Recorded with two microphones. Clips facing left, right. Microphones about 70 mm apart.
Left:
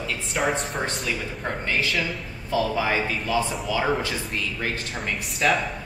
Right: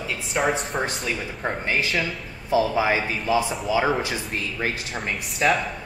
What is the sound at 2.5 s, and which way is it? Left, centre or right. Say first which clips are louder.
Speech: right 3 dB; centre.